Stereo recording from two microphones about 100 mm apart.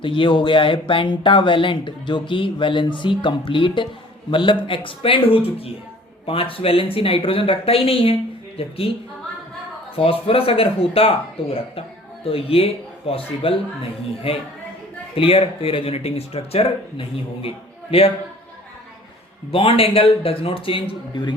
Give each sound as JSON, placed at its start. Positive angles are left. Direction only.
{"t": 0.0, "sound": "speech", "side_deg": 55}
{"t": 19.5, "sound": "speech", "side_deg": 70}